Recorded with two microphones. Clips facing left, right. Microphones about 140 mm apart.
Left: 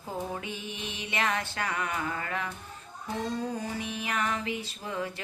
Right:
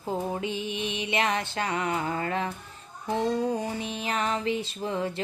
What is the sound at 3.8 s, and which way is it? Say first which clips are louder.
Mantra: right 2 dB; 25° right (ahead or behind).